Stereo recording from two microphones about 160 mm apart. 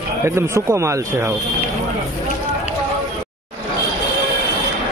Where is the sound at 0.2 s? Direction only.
20° right (ahead or behind).